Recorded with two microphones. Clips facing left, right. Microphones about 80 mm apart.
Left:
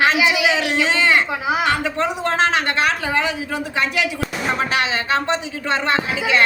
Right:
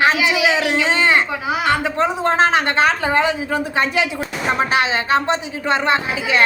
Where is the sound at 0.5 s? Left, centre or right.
Right.